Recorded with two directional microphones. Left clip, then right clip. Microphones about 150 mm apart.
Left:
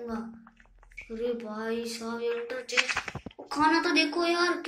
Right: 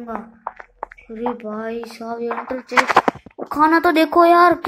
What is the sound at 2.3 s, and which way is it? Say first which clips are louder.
Speech: right 13 dB; 45° right (ahead or behind).